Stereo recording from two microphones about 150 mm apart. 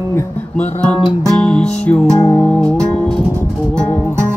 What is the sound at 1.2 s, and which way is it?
Music, 5° left (ahead or behind).